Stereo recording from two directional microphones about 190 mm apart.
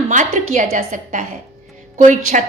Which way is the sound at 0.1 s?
40° right (ahead or behind).